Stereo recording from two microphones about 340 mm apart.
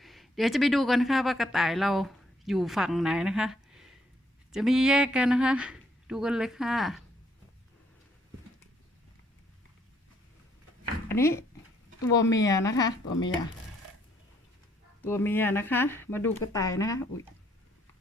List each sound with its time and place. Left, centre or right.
0.0 s speech: centre
11.1 s speech: centre
13.1 s speech: left
15.0 s speech: centre